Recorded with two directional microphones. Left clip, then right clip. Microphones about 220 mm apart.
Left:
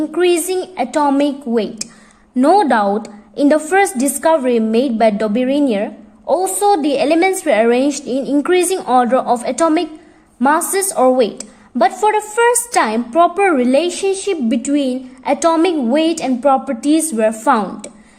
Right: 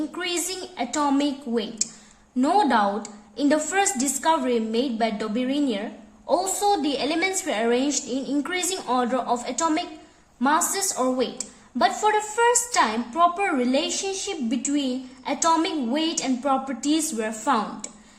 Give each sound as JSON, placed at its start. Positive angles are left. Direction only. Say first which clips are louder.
{"t": 0.1, "sound": "a woman's voice", "louder": "left 14 dB", "side_deg": 25}